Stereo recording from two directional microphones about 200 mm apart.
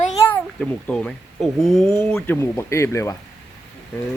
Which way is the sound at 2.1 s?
10° left (ahead or behind).